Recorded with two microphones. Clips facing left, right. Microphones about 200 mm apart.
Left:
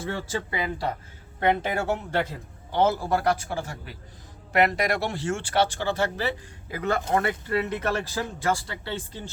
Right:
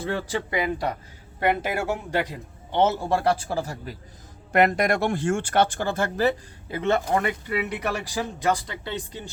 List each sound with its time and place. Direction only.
0.3 s a man's voice: 15° right (ahead or behind); by 3.9 s 35° right (ahead or behind)
4.5 s speech: 50° right (ahead or behind)
6.7 s speech: 25° right (ahead or behind)